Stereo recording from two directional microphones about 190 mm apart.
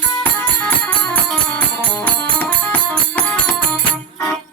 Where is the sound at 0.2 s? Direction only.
5° left (ahead or behind).